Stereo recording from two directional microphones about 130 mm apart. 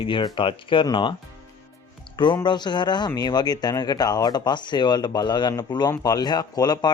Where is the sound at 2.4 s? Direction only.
35° left (ahead or behind).